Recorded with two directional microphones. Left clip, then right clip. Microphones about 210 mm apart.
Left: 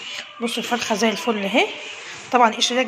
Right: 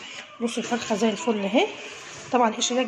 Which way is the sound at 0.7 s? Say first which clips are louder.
Left 5 dB; centre (ahead or behind).